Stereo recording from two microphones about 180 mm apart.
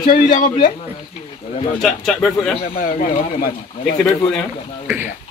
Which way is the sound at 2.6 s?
50° left (ahead or behind).